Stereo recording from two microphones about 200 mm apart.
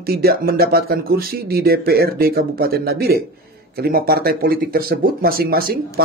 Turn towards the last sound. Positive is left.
turn(degrees=-50)  # may be behind; listen again after turning